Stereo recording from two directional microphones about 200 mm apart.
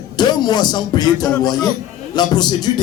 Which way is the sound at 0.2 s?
20° left (ahead or behind).